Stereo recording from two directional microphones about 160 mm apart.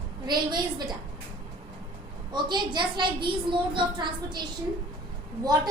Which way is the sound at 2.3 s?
30° right (ahead or behind).